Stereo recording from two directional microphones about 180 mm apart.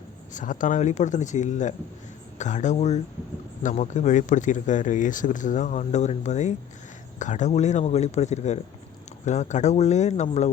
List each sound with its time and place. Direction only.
0.3 s speech: 45° left (ahead or behind)